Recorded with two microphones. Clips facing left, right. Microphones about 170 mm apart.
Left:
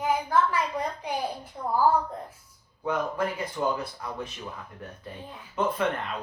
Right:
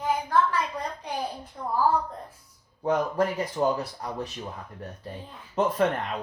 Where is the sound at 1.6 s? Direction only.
10° left (ahead or behind).